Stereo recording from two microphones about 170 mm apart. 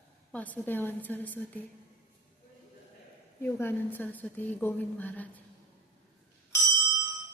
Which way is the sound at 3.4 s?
10° left (ahead or behind).